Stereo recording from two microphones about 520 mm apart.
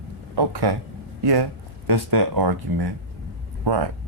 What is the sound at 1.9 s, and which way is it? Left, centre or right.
Speech, right.